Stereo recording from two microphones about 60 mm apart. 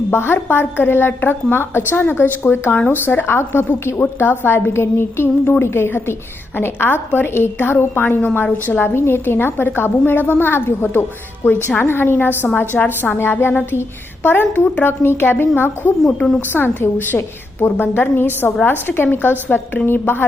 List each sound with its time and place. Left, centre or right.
0.1 s a woman's voice: left
13.5 s a sound: left
13.7 s a woman's voice: left
16.0 s a woman's voice: centre
16.5 s a woman's voice: left